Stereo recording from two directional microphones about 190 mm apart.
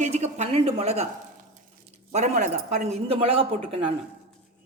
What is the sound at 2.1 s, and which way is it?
A woman's voice, 40° right (ahead or behind).